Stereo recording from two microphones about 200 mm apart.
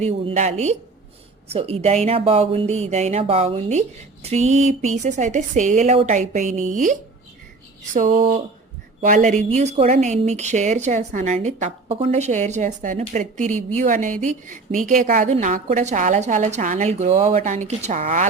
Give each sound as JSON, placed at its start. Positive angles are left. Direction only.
{"t": 0.0, "sound": "a woman's voice", "side_deg": -35}
{"t": 8.1, "sound": "speech", "side_deg": -30}
{"t": 9.0, "sound": "a woman's voice", "side_deg": -40}